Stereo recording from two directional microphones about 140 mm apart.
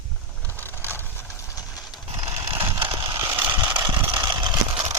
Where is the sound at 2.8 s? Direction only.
35° right (ahead or behind).